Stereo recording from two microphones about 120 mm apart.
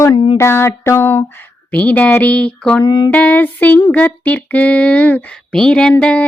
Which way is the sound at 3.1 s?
10° left (ahead or behind).